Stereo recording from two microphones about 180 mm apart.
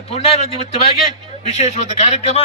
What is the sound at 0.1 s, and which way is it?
A man's voice, 35° left (ahead or behind).